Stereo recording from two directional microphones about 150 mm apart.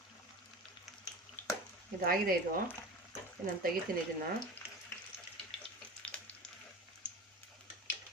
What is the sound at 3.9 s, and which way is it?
Speech, 70° right (ahead or behind).